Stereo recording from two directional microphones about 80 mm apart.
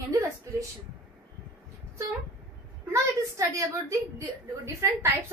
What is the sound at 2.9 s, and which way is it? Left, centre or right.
Speech, right.